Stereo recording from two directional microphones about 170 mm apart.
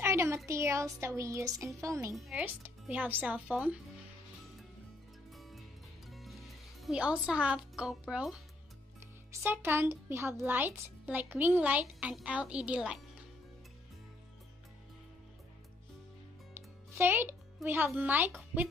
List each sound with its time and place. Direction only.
0.0 s a sound: 15° right (ahead or behind)
0.5 s speech: 15° right (ahead or behind)
2.1 s a child's voice: centre (ahead or behind)
5.3 s music: centre (ahead or behind)
6.8 s a child's voice: 5° right (ahead or behind)
9.3 s speech: 15° right (ahead or behind)
16.5 s music: 15° right (ahead or behind)
17.6 s speech: 10° right (ahead or behind)